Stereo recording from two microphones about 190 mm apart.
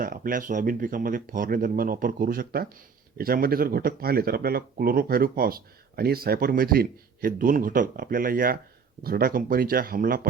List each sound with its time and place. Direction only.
0.0 s speech: 45° right (ahead or behind)